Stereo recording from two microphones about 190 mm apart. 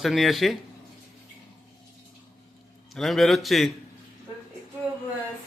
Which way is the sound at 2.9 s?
Centre (ahead or behind).